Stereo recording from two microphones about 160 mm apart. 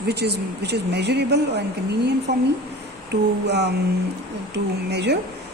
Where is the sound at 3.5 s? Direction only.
90° right.